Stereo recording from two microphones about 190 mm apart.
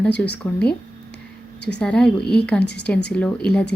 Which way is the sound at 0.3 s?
60° left (ahead or behind).